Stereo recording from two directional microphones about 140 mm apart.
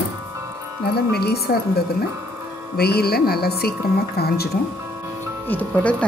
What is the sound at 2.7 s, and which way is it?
Speech, 90° left.